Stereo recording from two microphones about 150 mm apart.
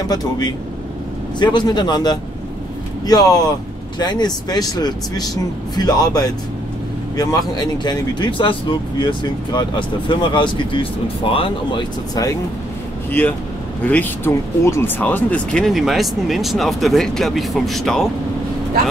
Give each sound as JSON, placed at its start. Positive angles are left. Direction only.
{"t": 0.1, "sound": "speech", "side_deg": 25}
{"t": 13.2, "sound": "speech", "side_deg": 10}